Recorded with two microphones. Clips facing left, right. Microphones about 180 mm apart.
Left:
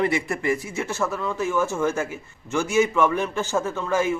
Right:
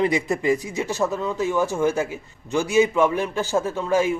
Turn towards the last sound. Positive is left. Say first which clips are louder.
# right 2 dB
turn(degrees=-15)  # may be behind; listen again after turning